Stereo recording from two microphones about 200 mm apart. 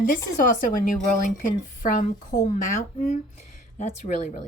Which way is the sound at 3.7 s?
35° left (ahead or behind).